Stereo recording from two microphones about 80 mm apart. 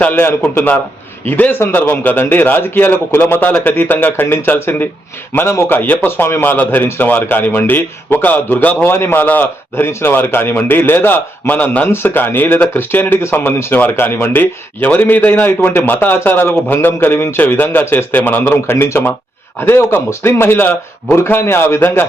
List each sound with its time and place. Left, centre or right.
0.0 s a man's voice: left